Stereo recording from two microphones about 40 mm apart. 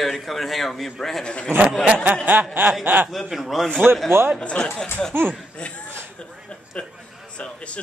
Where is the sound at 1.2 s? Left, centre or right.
Left.